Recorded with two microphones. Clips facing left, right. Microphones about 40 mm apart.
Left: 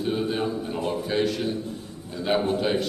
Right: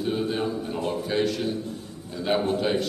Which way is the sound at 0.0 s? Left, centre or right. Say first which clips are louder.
Even; centre.